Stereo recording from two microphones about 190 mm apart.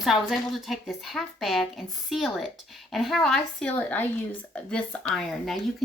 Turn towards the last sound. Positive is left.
turn(degrees=5)  # may be behind; listen again after turning